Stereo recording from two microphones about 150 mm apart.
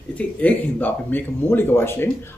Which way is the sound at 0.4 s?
10° left (ahead or behind).